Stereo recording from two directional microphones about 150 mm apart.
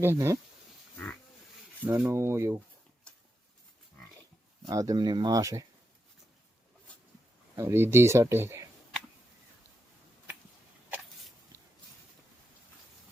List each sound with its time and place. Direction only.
0.0 s speech: 15° right (ahead or behind)
1.8 s speech: 15° right (ahead or behind)
4.6 s speech: 25° right (ahead or behind)
7.5 s speech: 15° right (ahead or behind)